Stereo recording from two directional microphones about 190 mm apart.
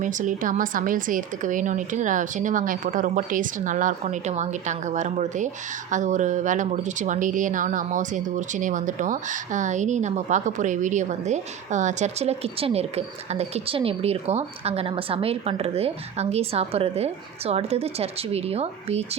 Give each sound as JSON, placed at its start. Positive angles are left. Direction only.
{"t": 0.0, "sound": "a woman's voice", "side_deg": -40}